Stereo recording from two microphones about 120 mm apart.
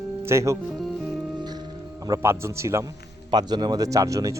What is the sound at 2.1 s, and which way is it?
Speech, 20° right (ahead or behind).